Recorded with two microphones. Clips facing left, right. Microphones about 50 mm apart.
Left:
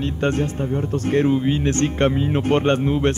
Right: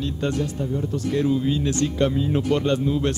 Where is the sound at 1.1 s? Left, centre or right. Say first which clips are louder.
Left 3 dB; left.